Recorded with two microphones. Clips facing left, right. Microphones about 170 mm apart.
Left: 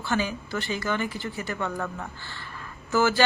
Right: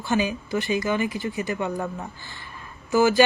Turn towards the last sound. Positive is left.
turn(degrees=-15)  # may be behind; listen again after turning